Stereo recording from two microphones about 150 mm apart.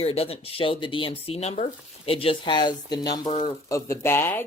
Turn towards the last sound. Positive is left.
turn(degrees=15)  # may be behind; listen again after turning